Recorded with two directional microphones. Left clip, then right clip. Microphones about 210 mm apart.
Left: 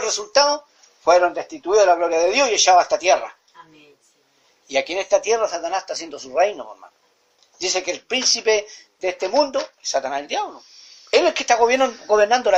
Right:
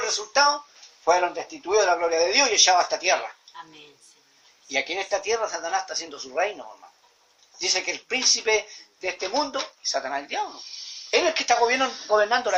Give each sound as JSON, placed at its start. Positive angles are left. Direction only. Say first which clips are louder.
{"t": 0.0, "sound": "speech", "louder": "left 3 dB", "side_deg": 30}
{"t": 1.6, "sound": "speech", "louder": "left 6 dB", "side_deg": 30}
{"t": 4.7, "sound": "speech", "louder": "left 7 dB", "side_deg": 30}
{"t": 7.6, "sound": "speech", "louder": "left 3 dB", "side_deg": 30}